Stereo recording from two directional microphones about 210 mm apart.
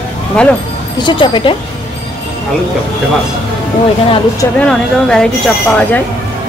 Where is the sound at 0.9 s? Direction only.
20° left (ahead or behind).